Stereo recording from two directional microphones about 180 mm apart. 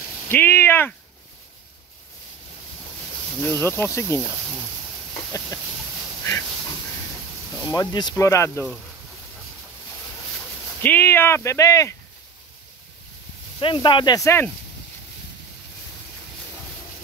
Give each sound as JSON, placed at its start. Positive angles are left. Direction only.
{"t": 0.3, "sound": "speech", "side_deg": 10}
{"t": 3.3, "sound": "speech", "side_deg": 10}
{"t": 5.1, "sound": "a sound", "side_deg": 20}
{"t": 7.6, "sound": "speech", "side_deg": 20}
{"t": 10.8, "sound": "speech", "side_deg": 10}
{"t": 13.6, "sound": "speech", "side_deg": 30}